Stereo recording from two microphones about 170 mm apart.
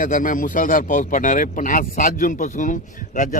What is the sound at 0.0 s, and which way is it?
A man's voice, 50° left (ahead or behind).